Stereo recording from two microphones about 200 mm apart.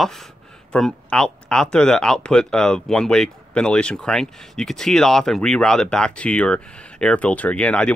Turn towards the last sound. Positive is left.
turn(degrees=5)  # may be behind; listen again after turning